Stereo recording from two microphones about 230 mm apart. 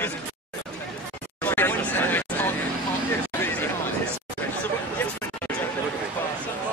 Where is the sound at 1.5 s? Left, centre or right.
Centre.